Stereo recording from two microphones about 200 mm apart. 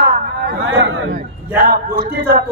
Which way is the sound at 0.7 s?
70° right (ahead or behind).